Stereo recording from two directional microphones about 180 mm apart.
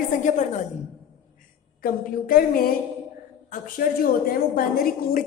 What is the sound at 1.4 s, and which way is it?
A woman's voice, 50° left (ahead or behind).